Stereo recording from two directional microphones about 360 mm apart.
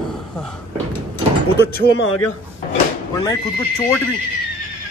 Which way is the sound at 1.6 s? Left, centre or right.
Left.